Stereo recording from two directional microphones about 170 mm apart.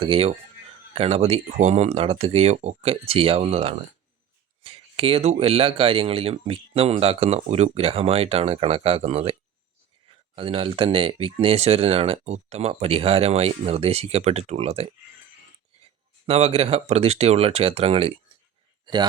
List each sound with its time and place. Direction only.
0.0 s speech: 35° right (ahead or behind)
16.2 s speech: 35° right (ahead or behind)